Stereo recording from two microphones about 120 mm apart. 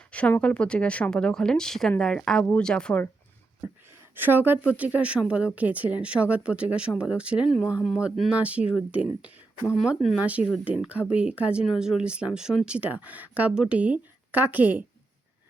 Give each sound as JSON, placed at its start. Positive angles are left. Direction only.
{"t": 0.1, "sound": "a woman's voice", "side_deg": 10}
{"t": 3.6, "sound": "speech", "side_deg": -15}